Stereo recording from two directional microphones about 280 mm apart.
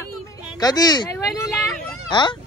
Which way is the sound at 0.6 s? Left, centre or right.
Centre.